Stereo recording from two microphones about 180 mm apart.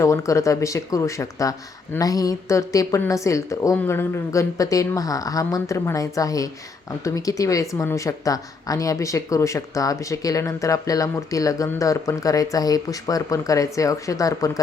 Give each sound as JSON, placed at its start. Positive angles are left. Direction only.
{"t": 0.0, "sound": "speech", "side_deg": 15}